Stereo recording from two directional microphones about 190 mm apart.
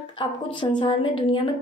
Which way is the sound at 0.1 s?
25° left (ahead or behind).